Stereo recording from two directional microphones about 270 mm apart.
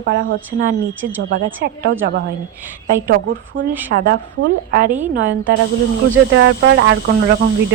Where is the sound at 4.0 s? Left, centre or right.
Right.